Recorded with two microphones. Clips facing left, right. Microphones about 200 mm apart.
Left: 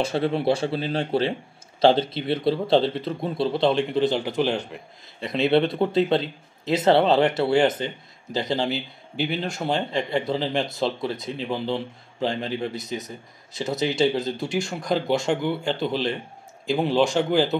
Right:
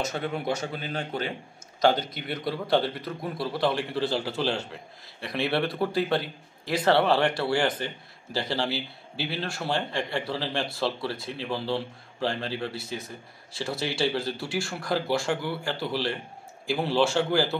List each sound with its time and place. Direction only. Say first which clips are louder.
0.0 s a man's voice: left 7 dB; 30° left (ahead or behind)